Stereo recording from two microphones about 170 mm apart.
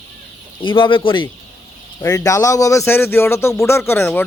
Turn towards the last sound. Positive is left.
turn(degrees=10)  # may be behind; listen again after turning